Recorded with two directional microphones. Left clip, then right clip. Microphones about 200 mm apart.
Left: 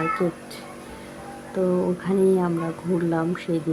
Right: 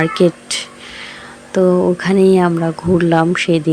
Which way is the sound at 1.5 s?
30° right (ahead or behind).